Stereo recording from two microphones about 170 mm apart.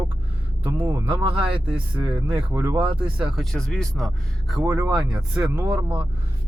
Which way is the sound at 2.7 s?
30° right (ahead or behind).